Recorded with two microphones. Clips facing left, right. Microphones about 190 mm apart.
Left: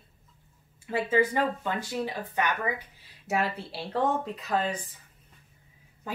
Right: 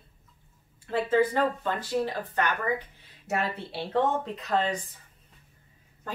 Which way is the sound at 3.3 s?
Centre (ahead or behind).